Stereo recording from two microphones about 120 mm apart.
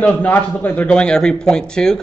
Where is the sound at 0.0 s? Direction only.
15° left (ahead or behind).